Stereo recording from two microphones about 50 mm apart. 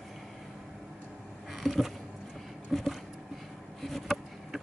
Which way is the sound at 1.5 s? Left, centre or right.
Centre.